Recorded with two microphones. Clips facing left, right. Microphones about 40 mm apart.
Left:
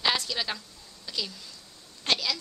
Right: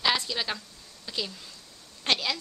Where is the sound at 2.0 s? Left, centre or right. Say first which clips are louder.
Right 1 dB; right.